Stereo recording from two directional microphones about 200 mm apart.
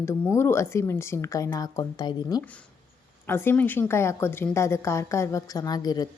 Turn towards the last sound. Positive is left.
turn(degrees=20)  # may be behind; listen again after turning